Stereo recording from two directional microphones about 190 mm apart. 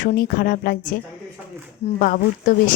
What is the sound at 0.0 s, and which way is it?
Speech, 45° left (ahead or behind).